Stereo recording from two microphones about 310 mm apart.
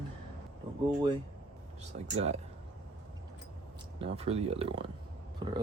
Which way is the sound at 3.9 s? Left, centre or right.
Centre.